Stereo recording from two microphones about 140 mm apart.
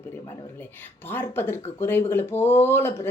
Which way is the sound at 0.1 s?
15° left (ahead or behind).